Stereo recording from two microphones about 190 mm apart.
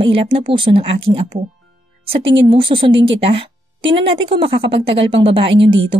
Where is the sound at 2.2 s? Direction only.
75° right (ahead or behind).